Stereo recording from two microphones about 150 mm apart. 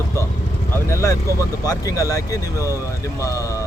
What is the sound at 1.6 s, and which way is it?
Speech, 25° left (ahead or behind).